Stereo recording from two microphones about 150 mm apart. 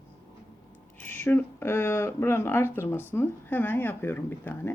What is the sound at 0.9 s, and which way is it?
Speech, 15° left (ahead or behind).